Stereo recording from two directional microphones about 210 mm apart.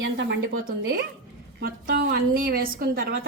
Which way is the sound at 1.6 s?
45° right (ahead or behind).